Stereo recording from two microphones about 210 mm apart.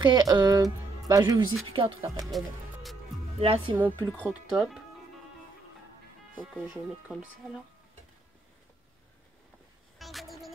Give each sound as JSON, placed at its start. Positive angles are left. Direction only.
{"t": 0.0, "sound": "speech", "side_deg": -20}
{"t": 2.3, "sound": "music", "side_deg": 0}
{"t": 3.3, "sound": "speech", "side_deg": -30}
{"t": 3.7, "sound": "speech", "side_deg": -10}
{"t": 6.5, "sound": "speech", "side_deg": 0}
{"t": 9.9, "sound": "vehicle", "side_deg": 0}